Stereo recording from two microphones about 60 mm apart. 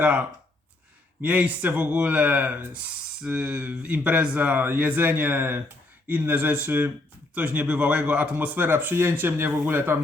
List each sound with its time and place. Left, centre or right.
0.0 s speech: right